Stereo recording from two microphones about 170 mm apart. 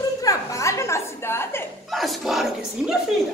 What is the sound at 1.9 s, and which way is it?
Speech, centre (ahead or behind).